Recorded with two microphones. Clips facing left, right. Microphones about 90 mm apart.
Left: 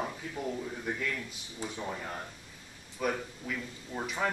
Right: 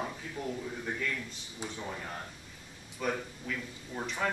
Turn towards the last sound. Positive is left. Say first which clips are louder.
# left 1 dB
turn(degrees=5)  # may be behind; listen again after turning